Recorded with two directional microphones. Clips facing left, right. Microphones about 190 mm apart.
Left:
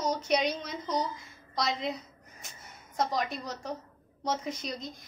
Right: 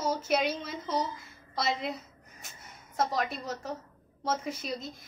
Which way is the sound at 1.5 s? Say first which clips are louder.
Even; 5° right (ahead or behind).